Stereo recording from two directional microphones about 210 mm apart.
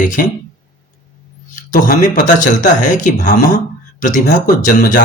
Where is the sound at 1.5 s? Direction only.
40° left (ahead or behind).